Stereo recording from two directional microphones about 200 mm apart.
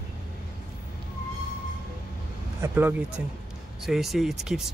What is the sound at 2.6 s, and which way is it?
Speech, 10° right (ahead or behind).